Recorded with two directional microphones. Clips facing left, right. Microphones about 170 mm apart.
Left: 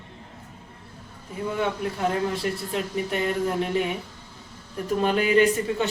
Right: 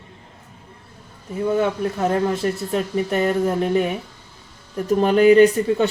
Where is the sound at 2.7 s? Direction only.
45° right (ahead or behind).